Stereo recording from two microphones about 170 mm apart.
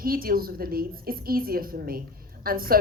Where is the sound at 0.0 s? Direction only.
60° right (ahead or behind).